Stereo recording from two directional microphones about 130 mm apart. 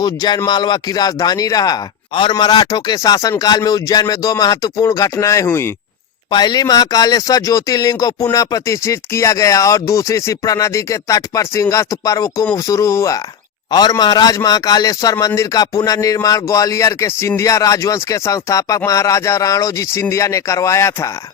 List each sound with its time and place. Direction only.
0.0 s speech: 30° left (ahead or behind)
6.3 s speech: 30° left (ahead or behind)